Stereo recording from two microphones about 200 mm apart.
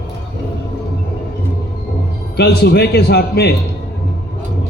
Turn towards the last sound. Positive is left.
turn(degrees=55)  # may be behind; listen again after turning